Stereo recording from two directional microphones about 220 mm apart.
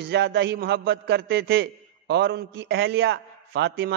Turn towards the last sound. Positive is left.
turn(degrees=-45)  # may be behind; listen again after turning